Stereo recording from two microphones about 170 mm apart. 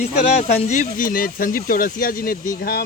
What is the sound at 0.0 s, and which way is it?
Speech, 40° left (ahead or behind).